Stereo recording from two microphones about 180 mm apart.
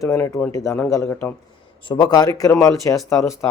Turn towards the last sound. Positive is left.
turn(degrees=15)  # may be behind; listen again after turning